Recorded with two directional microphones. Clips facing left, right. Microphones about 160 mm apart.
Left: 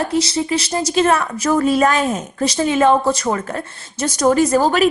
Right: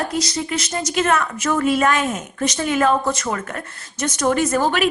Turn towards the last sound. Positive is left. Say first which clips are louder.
# left 4 dB
turn(degrees=35)  # may be behind; listen again after turning